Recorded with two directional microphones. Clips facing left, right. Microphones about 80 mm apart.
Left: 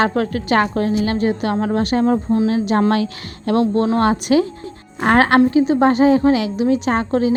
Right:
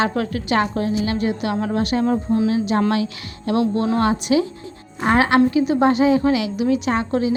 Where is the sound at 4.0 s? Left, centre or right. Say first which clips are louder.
Left 2 dB; left.